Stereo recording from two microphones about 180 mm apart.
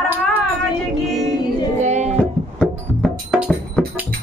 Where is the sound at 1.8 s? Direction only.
40° right (ahead or behind).